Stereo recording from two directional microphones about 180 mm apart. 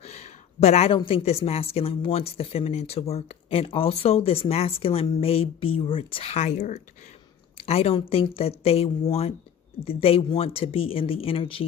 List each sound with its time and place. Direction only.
0.0 s speech: 40° left (ahead or behind)